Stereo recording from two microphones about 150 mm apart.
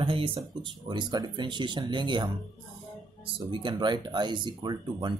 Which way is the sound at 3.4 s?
35° right (ahead or behind).